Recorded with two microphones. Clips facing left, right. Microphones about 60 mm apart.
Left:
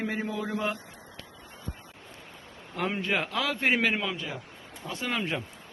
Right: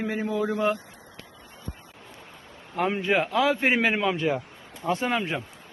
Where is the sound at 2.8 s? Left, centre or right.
Centre.